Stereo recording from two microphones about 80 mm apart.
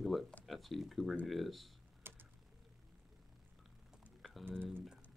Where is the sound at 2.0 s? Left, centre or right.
Right.